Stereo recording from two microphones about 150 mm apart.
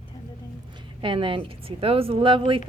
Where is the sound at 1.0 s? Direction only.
35° right (ahead or behind).